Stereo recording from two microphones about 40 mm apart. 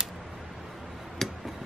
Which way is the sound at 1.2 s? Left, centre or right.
Centre.